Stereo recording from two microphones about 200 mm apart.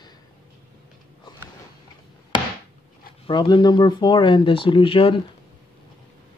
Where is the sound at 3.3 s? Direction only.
20° left (ahead or behind).